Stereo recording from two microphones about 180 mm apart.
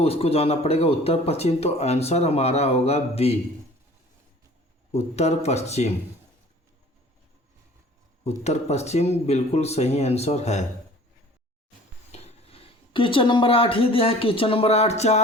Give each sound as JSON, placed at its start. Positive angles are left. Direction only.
{"t": 0.0, "sound": "speech", "side_deg": 35}
{"t": 4.9, "sound": "speech", "side_deg": 35}
{"t": 8.2, "sound": "speech", "side_deg": 35}
{"t": 12.1, "sound": "speech", "side_deg": 35}